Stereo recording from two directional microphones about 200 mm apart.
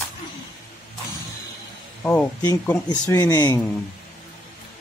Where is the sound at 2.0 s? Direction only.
10° left (ahead or behind).